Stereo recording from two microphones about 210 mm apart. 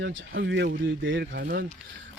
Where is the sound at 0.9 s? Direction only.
65° right (ahead or behind).